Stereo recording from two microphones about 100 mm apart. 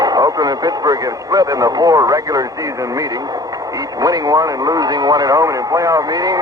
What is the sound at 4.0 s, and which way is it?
Speech, 35° right (ahead or behind).